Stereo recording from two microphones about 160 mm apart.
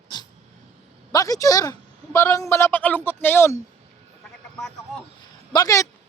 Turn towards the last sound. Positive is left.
turn(degrees=20)  # may be behind; listen again after turning